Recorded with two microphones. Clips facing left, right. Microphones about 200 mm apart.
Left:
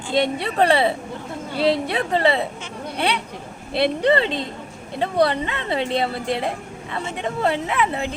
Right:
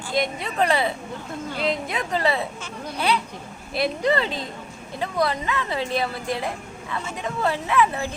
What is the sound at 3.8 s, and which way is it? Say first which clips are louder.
A woman's voice: left 4 dB; 30° left (ahead or behind).